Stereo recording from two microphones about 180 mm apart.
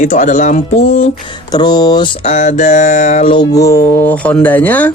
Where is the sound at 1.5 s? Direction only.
20° left (ahead or behind).